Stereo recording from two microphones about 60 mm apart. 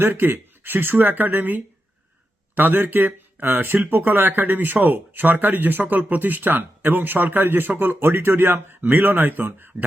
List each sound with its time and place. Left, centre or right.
0.1 s speech: right